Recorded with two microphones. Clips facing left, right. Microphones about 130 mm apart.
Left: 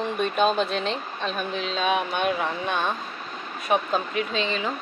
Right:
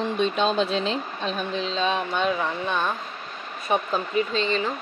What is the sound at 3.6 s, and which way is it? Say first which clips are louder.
Speech: left 1 dB; centre (ahead or behind).